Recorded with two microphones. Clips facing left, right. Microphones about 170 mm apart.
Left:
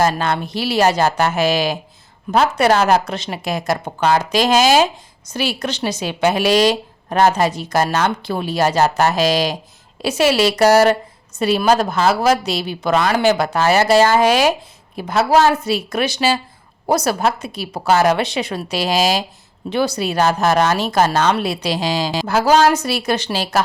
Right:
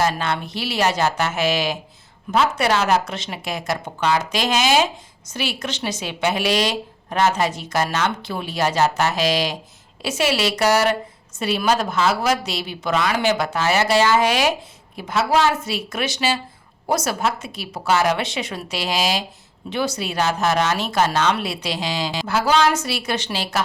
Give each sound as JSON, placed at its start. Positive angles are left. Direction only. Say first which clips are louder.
{"t": 0.0, "sound": "a woman's voice", "louder": "left 4 dB", "side_deg": 40}
{"t": 4.2, "sound": "a woman's voice", "louder": "left 6 dB", "side_deg": 40}